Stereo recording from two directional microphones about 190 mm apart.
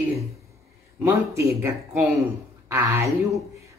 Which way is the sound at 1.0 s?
15° right (ahead or behind).